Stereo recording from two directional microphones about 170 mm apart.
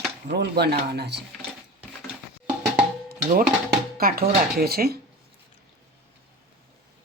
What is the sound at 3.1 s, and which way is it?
Music, 60° right (ahead or behind).